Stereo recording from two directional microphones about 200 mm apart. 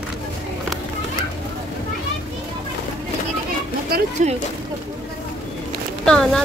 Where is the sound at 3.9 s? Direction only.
35° right (ahead or behind).